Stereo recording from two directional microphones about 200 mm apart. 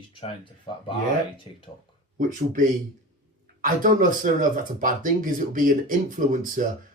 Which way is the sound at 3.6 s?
40° right (ahead or behind).